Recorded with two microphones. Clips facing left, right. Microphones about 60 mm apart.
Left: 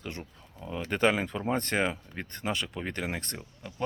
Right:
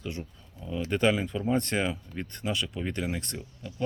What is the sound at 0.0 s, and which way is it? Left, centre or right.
Speech, left.